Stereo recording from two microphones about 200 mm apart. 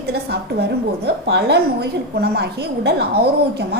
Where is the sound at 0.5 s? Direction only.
55° right (ahead or behind).